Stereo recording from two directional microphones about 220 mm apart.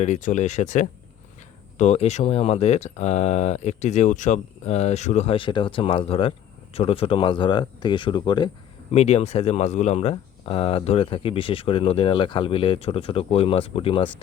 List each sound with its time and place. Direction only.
0.0 s speech: 35° left (ahead or behind)